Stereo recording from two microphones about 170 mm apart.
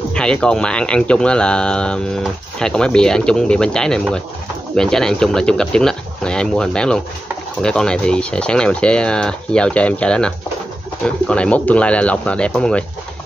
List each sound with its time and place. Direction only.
0.1 s speech: 5° left (ahead or behind)